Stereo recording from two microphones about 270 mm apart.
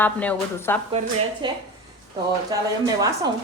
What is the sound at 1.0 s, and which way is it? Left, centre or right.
Speech, right.